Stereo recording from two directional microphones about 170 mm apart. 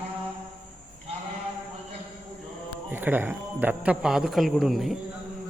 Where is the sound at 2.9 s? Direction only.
10° right (ahead or behind).